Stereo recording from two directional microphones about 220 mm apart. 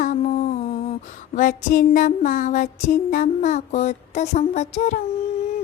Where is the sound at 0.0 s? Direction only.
35° left (ahead or behind).